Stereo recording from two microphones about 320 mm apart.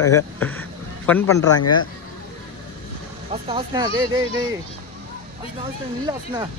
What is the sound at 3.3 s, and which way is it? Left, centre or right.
Speech, centre.